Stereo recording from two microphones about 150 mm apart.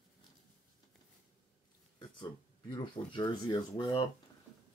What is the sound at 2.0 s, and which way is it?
Speech, 30° left (ahead or behind).